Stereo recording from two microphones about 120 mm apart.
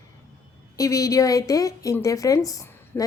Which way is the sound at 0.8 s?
30° left (ahead or behind).